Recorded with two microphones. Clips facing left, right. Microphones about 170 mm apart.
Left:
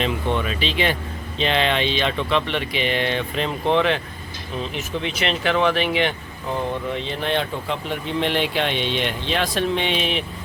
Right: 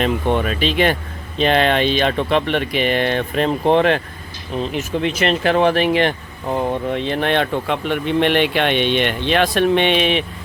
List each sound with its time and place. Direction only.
0.0 s speech: 50° right (ahead or behind)
5.0 s speech: 45° right (ahead or behind)
6.9 s speech: 60° right (ahead or behind)